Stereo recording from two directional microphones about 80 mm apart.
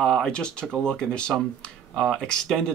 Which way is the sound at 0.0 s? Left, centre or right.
Centre.